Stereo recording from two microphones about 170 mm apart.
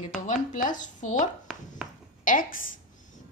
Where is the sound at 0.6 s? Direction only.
45° left (ahead or behind).